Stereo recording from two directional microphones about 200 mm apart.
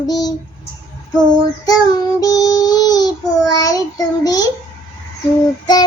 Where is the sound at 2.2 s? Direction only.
15° left (ahead or behind).